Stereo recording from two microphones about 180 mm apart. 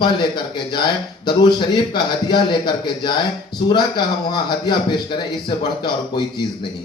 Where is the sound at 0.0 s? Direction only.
25° left (ahead or behind).